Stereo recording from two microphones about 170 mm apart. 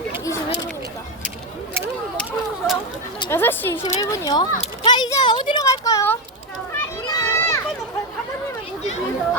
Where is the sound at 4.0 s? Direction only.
20° left (ahead or behind).